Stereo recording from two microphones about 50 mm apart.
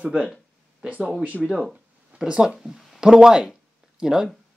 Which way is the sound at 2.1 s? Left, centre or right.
Centre.